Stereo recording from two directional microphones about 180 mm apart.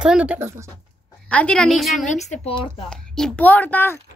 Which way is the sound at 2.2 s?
35° left (ahead or behind).